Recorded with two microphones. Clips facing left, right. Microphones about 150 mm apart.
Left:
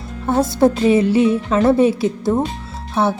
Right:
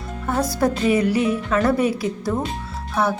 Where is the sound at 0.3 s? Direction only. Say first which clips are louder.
Left 6 dB; 25° left (ahead or behind).